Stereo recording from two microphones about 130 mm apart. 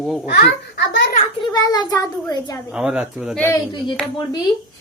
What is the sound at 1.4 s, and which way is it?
A child's voice, 30° left (ahead or behind).